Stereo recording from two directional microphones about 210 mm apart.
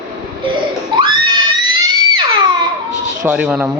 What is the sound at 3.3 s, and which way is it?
Speech, 5° right (ahead or behind).